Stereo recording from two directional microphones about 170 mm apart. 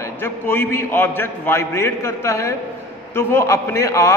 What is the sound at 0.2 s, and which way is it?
A man's voice, 15° left (ahead or behind).